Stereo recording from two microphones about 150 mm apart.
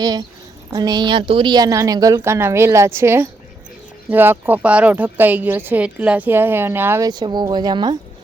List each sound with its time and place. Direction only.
0.0 s a woman's voice: 30° right (ahead or behind)